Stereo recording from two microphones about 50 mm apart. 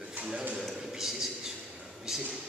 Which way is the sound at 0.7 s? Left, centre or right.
Centre.